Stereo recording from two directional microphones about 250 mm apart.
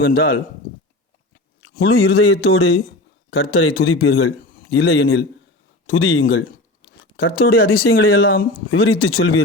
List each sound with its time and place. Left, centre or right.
0.0 s speech: left
1.8 s a man's voice: left
7.2 s speech: left
8.7 s speech: left